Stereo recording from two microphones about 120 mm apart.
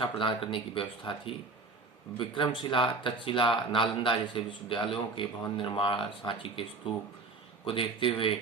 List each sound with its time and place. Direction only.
0.0 s speech: 45° left (ahead or behind)